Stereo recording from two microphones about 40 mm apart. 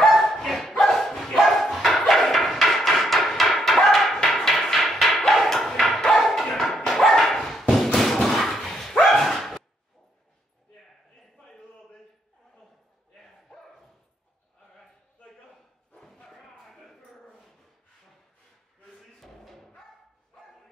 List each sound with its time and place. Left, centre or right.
0.1 s dog: centre
5.3 s bow-wow: centre
5.9 s dog: centre
11.3 s a sound: centre
13.2 s bow-wow: centre
16.3 s a sound: centre
18.9 s music: centre